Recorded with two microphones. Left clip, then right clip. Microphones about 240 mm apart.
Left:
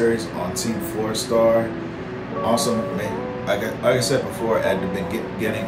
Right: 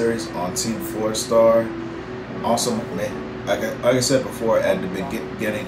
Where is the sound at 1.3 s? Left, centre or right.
Centre.